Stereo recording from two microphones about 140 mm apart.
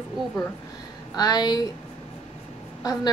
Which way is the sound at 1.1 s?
30° left (ahead or behind).